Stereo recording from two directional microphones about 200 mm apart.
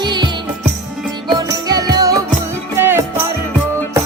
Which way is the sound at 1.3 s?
20° right (ahead or behind).